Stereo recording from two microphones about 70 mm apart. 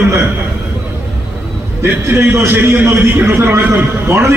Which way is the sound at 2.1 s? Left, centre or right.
Right.